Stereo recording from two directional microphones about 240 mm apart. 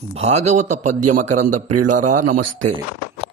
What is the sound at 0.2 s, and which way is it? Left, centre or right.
Speech, right.